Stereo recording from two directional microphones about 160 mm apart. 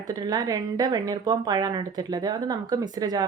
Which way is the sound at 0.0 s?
25° right (ahead or behind).